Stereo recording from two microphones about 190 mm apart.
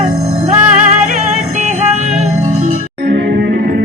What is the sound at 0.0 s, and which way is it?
Music, 35° right (ahead or behind).